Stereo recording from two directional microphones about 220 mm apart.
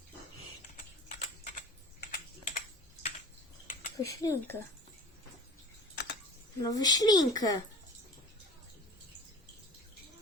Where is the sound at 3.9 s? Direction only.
15° left (ahead or behind).